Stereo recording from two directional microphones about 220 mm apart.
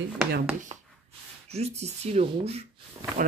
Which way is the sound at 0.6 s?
35° right (ahead or behind).